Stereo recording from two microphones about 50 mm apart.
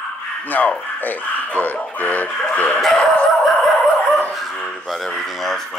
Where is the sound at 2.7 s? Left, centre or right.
Centre.